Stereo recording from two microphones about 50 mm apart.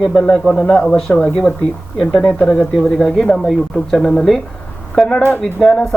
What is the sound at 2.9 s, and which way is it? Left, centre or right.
Speech, centre.